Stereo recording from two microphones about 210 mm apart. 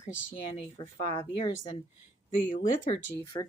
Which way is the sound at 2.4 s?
35° left (ahead or behind).